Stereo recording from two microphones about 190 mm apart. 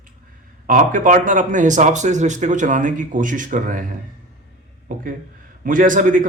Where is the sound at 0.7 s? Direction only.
45° right (ahead or behind).